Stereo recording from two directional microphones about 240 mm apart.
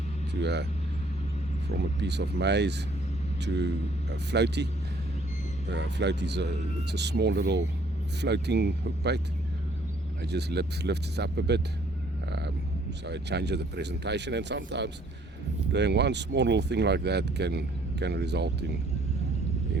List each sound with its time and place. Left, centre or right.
0.4 s speech: right
1.7 s speech: right
12.3 s a sound: right
13.1 s speech: right